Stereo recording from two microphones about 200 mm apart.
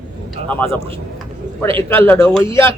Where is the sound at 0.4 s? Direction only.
10° left (ahead or behind).